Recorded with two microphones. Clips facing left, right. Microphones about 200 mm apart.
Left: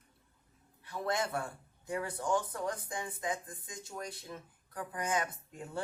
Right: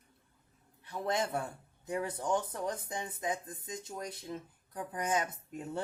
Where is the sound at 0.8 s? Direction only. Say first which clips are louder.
Right 1 dB; 20° right (ahead or behind).